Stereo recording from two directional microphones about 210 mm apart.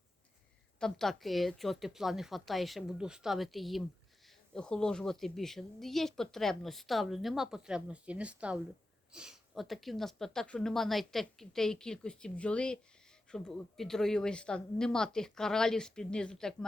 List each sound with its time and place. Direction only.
0.8 s speech: centre (ahead or behind)